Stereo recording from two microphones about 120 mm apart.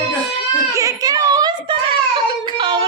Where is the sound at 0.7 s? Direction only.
30° right (ahead or behind).